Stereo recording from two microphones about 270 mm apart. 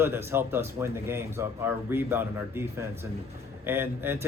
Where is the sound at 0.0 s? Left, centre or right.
Centre.